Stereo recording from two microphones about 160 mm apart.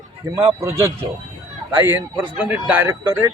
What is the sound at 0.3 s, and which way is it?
A man's voice, 20° right (ahead or behind).